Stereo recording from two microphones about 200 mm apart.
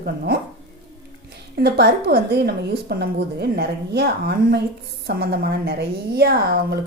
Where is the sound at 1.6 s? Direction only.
55° right (ahead or behind).